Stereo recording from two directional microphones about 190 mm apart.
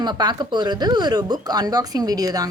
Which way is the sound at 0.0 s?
20° right (ahead or behind).